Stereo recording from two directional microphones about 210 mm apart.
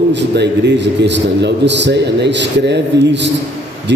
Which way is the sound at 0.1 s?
55° right (ahead or behind).